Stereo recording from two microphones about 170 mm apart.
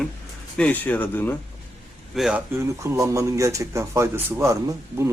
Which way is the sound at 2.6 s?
15° right (ahead or behind).